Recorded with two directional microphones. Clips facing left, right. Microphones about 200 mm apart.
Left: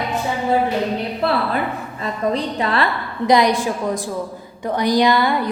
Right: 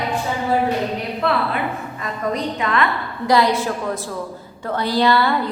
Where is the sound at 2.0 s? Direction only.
30° left (ahead or behind).